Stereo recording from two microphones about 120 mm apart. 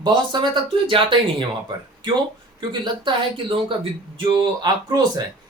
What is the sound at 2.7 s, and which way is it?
Speech, 40° right (ahead or behind).